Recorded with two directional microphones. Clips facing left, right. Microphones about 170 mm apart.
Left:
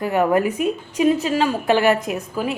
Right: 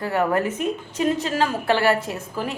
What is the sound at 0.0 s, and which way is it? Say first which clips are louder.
A woman's voice: left 4 dB; 15° left (ahead or behind).